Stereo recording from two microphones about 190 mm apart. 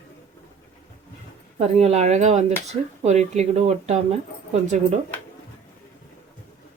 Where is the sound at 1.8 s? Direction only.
35° right (ahead or behind).